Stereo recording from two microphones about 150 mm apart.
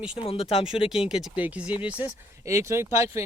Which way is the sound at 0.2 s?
40° left (ahead or behind).